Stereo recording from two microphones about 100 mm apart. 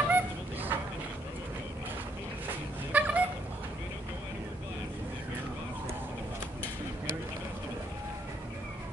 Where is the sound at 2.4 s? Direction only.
15° right (ahead or behind).